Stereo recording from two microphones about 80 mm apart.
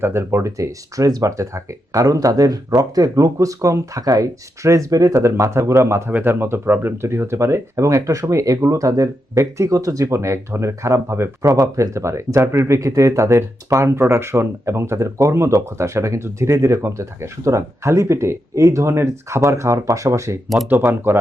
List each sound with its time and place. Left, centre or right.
0.0 s speech: right
20.9 s speech: right